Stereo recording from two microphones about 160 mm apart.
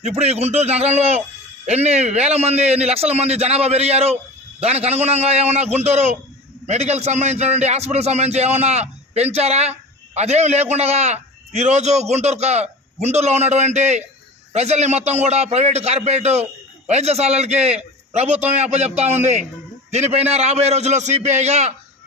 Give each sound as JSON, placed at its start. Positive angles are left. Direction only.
{"t": 0.0, "sound": "a man's voice", "side_deg": -40}